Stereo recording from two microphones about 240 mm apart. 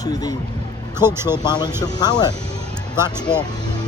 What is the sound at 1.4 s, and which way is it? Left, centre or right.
Speech, centre.